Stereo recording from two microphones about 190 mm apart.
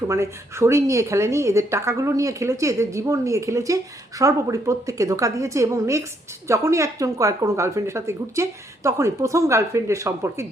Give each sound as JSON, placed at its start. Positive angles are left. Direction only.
{"t": 0.1, "sound": "speech", "side_deg": -15}